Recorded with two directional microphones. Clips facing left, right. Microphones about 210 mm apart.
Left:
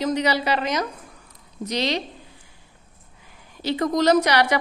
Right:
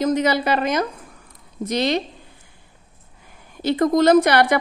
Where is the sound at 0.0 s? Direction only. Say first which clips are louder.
Right 3 dB; 50° right (ahead or behind).